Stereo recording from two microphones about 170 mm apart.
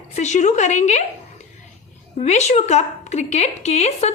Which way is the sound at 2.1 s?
40° left (ahead or behind).